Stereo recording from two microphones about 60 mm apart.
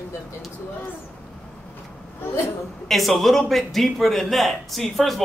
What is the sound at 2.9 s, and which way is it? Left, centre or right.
A man's voice, centre.